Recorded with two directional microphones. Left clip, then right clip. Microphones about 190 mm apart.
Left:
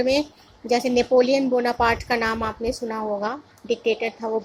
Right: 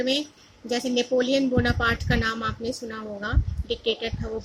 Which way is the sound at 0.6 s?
5° left (ahead or behind).